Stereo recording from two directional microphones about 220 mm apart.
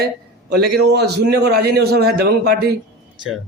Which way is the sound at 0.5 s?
45° right (ahead or behind).